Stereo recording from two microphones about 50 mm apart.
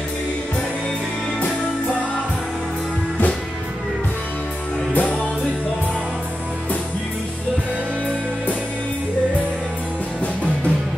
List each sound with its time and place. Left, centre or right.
4.9 s music: left
10.2 s music: left